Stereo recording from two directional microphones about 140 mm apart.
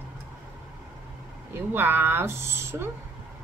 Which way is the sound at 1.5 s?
15° right (ahead or behind).